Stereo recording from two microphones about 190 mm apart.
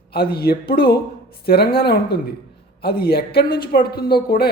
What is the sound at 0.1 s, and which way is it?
A woman's voice, 55° left (ahead or behind).